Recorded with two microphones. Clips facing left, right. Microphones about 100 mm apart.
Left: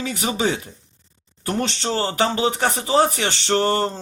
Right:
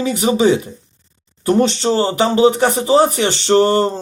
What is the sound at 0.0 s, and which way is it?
Speech, 20° right (ahead or behind).